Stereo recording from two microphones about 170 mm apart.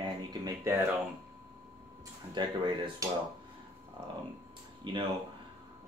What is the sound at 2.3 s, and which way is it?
Speech, 25° right (ahead or behind).